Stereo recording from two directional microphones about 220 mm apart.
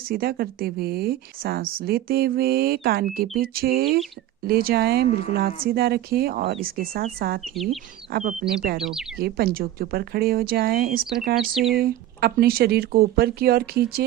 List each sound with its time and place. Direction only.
0.1 s speech: 45° right (ahead or behind)